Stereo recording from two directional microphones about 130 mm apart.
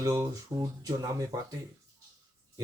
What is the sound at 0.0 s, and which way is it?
Mantra, 25° right (ahead or behind).